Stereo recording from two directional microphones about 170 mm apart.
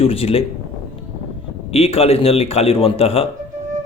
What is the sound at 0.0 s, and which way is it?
Speech, 35° left (ahead or behind).